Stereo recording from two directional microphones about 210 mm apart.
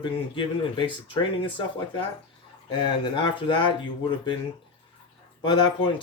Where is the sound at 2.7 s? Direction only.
20° left (ahead or behind).